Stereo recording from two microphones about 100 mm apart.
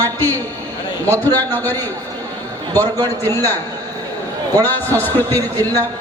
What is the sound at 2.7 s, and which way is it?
Speech, 35° right (ahead or behind).